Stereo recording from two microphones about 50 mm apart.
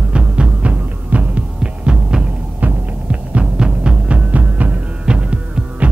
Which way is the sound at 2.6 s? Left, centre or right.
Right.